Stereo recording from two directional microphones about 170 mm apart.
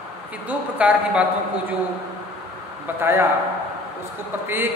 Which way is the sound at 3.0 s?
15° right (ahead or behind).